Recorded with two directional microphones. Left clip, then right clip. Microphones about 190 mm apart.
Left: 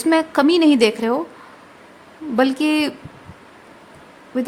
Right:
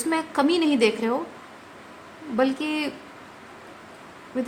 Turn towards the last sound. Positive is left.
turn(degrees=40)  # may be behind; listen again after turning